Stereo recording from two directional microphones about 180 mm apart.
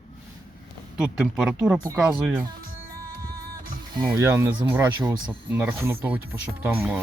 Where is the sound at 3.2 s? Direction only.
55° right (ahead or behind).